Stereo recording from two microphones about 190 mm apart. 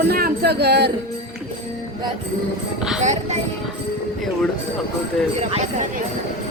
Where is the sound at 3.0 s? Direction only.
40° right (ahead or behind).